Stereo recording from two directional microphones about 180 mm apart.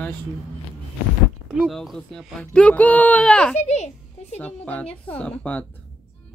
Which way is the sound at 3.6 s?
40° left (ahead or behind).